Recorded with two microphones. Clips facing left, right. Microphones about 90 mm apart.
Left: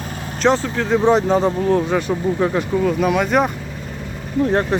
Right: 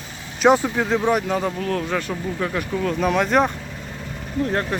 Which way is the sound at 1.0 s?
25° left (ahead or behind).